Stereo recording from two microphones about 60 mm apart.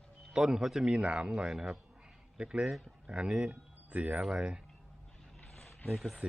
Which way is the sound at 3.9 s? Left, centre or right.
Right.